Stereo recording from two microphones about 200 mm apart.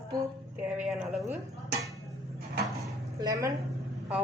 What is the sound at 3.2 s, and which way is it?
Speech, 20° right (ahead or behind).